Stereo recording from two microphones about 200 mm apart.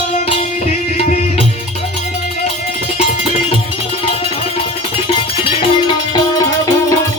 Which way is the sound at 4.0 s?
30° left (ahead or behind).